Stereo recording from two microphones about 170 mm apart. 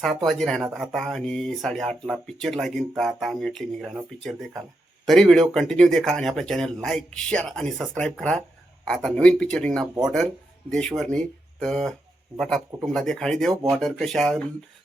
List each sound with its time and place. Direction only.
0.0 s speech: centre (ahead or behind)
13.5 s speech: 20° right (ahead or behind)
13.7 s speech: centre (ahead or behind)